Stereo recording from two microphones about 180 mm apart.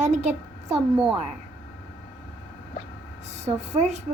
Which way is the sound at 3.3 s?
40° right (ahead or behind).